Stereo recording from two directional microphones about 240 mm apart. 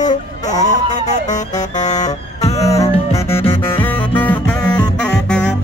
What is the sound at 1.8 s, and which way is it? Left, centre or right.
Music, left.